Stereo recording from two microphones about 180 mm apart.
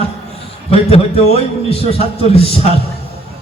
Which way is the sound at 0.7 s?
35° left (ahead or behind).